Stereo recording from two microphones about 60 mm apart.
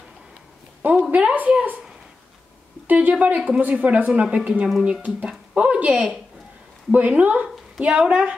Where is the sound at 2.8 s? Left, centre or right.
Right.